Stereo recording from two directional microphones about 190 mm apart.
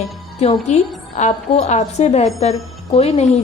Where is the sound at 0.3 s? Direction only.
35° left (ahead or behind).